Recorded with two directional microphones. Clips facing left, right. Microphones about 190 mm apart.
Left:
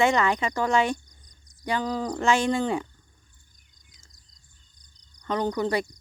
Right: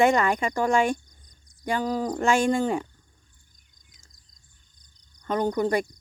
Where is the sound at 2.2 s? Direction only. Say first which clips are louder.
Right 1 dB; 50° right (ahead or behind).